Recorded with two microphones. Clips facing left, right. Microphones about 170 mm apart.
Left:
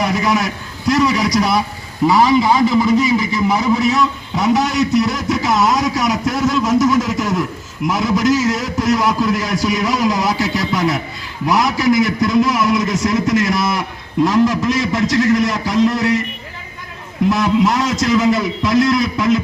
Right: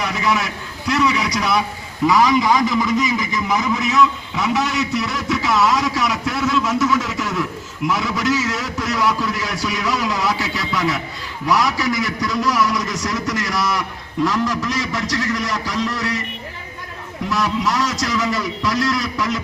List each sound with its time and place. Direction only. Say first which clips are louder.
0.0 s a man's voice: left 4 dB; 40° left (ahead or behind)
17.2 s a man's voice: left 6 dB; 50° left (ahead or behind)
18.3 s a man's voice: left 6 dB; 20° left (ahead or behind)